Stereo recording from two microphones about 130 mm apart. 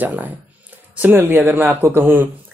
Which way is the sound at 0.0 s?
15° right (ahead or behind).